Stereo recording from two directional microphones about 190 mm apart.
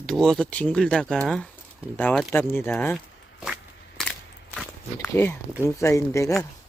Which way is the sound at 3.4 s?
Centre (ahead or behind).